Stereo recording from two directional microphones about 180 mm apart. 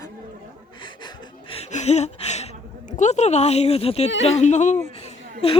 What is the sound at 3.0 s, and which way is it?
Speech, 40° left (ahead or behind).